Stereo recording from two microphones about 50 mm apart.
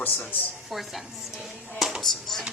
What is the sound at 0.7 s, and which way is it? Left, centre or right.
Speech, centre.